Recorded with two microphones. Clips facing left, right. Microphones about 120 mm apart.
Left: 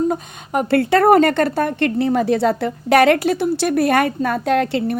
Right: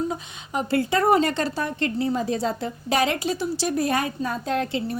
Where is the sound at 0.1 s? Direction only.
55° left (ahead or behind).